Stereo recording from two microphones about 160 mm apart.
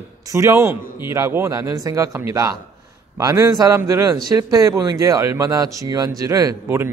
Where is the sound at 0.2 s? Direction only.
20° right (ahead or behind).